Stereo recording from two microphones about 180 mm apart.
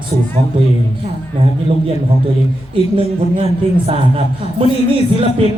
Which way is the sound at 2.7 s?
30° right (ahead or behind).